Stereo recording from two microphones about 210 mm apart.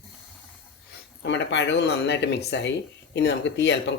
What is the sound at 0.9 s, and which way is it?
Speech, 55° left (ahead or behind).